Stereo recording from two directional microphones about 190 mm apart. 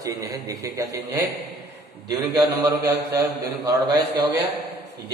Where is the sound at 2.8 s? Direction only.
15° right (ahead or behind).